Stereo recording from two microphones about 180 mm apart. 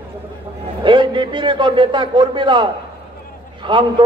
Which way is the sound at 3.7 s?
25° right (ahead or behind).